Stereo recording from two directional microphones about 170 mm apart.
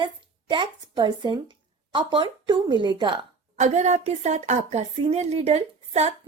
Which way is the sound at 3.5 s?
45° right (ahead or behind).